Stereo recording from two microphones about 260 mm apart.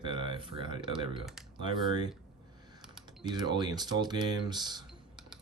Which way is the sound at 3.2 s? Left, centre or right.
Centre.